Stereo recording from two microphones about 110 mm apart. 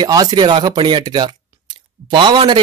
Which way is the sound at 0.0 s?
35° right (ahead or behind).